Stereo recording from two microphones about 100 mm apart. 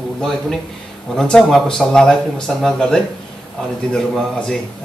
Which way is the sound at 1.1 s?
5° left (ahead or behind).